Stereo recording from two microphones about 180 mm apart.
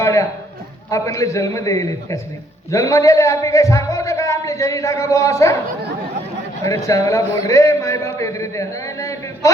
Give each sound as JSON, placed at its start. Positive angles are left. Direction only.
{"t": 0.0, "sound": "a sound", "side_deg": 15}
{"t": 0.9, "sound": "a man's voice", "side_deg": 20}
{"t": 6.7, "sound": "a man's voice", "side_deg": 20}